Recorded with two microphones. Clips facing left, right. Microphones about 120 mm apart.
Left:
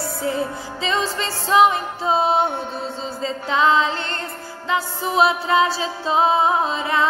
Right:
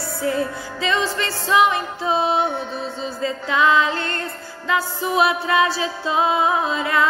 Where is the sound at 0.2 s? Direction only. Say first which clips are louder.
Right 2 dB; 25° left (ahead or behind).